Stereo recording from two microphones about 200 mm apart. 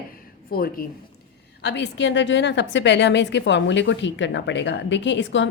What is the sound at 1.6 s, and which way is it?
A woman's voice, 60° left (ahead or behind).